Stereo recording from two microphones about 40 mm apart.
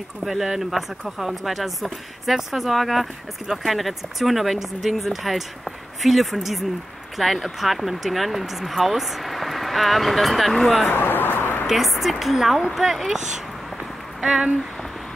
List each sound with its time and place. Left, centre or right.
0.2 s speech: centre
10.9 s a sound: left
11.6 s speech: centre